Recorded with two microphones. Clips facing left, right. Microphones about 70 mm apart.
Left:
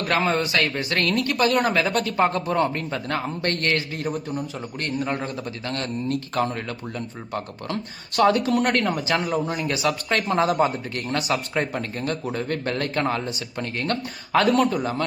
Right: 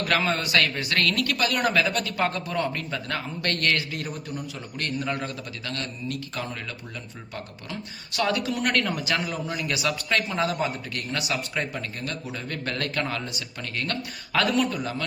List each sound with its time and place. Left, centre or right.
0.0 s speech: left